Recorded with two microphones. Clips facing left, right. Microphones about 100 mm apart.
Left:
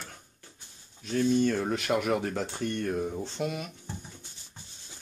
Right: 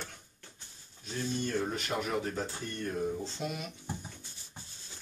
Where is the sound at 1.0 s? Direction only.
75° left (ahead or behind).